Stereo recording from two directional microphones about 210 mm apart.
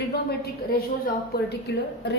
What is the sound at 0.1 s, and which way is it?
A woman's voice, 50° left (ahead or behind).